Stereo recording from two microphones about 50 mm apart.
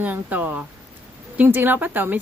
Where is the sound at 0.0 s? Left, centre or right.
Right.